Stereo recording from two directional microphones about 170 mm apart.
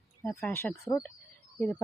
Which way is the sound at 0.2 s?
15° left (ahead or behind).